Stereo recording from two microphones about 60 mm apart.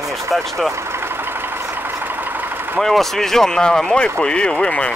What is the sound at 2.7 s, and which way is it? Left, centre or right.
Speech, centre.